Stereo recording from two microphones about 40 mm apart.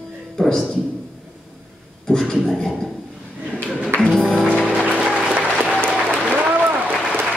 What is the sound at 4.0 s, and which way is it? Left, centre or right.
Music, centre.